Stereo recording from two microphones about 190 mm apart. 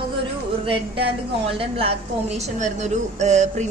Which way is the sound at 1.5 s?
30° right (ahead or behind).